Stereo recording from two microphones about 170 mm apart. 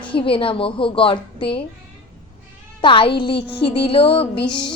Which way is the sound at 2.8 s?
30° left (ahead or behind).